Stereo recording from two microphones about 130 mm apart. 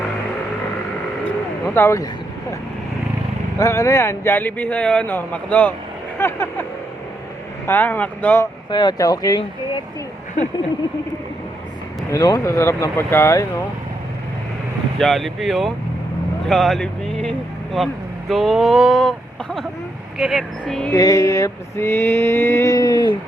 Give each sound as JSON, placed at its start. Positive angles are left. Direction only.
{"t": 1.6, "sound": "speech", "side_deg": 20}
{"t": 3.6, "sound": "speech", "side_deg": 25}
{"t": 7.7, "sound": "speech", "side_deg": 15}
{"t": 8.7, "sound": "speech", "side_deg": 35}
{"t": 12.1, "sound": "mantra", "side_deg": 25}
{"t": 14.9, "sound": "speech", "side_deg": 0}
{"t": 20.9, "sound": "mantra", "side_deg": 25}